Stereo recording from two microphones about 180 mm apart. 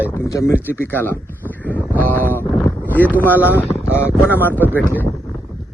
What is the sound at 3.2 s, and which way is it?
A man's voice, 10° left (ahead or behind).